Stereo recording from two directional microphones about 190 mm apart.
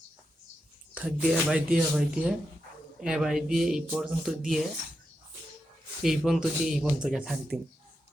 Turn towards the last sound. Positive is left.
turn(degrees=-5)  # may be behind; listen again after turning